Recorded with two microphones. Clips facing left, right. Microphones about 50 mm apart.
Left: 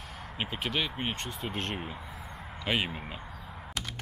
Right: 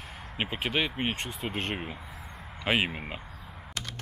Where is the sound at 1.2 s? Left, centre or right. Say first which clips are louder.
Right 2 dB; centre.